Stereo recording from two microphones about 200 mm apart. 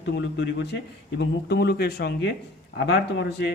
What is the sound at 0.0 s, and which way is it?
A man's voice, 60° left (ahead or behind).